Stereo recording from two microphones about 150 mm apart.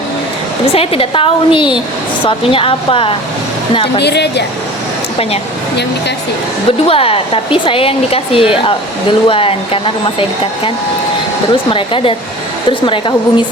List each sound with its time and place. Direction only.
0.7 s speech: 40° left (ahead or behind)
4.0 s speech: 90° left
6.7 s speech: 40° left (ahead or behind)
11.5 s speech: 35° left (ahead or behind)